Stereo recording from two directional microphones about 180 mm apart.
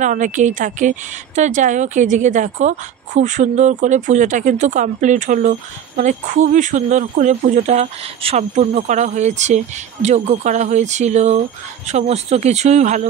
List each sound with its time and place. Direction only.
0.0 s speech: 45° right (ahead or behind)